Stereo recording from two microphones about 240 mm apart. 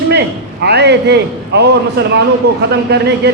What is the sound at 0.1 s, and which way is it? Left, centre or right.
A man's voice, right.